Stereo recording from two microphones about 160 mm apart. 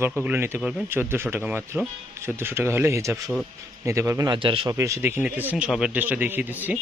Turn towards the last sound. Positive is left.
turn(degrees=-10)  # may be behind; listen again after turning